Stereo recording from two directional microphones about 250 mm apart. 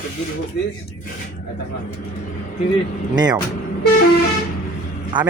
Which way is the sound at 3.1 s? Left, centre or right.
Centre.